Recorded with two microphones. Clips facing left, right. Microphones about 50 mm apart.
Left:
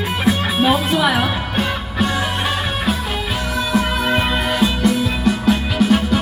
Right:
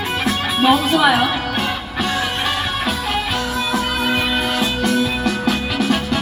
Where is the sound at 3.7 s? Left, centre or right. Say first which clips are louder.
Left 3 dB; left.